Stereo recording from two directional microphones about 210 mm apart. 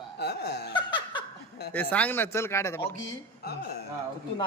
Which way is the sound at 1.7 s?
5° left (ahead or behind).